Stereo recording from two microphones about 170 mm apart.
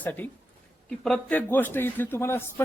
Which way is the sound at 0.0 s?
10° left (ahead or behind).